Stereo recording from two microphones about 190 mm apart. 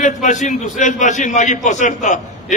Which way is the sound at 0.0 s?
40° left (ahead or behind).